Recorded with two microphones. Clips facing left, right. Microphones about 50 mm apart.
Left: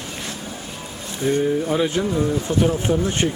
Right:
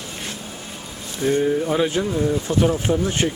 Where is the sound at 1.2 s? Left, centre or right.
Centre.